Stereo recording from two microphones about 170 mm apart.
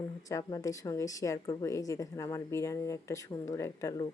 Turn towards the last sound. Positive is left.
turn(degrees=20)  # may be behind; listen again after turning